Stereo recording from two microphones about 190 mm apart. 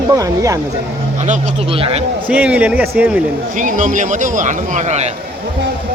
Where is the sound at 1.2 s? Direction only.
35° right (ahead or behind).